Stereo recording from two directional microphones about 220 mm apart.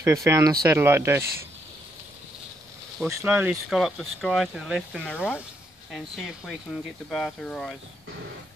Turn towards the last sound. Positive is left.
turn(degrees=0)  # may be behind; listen again after turning